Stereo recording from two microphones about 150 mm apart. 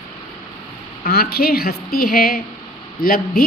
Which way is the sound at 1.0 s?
90° left.